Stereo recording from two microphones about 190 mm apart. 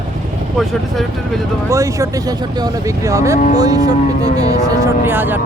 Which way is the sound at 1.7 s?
15° right (ahead or behind).